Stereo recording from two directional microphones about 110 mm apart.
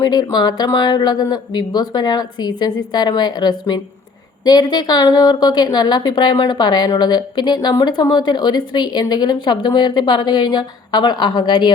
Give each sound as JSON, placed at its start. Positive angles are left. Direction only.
{"t": 0.0, "sound": "speech", "side_deg": 35}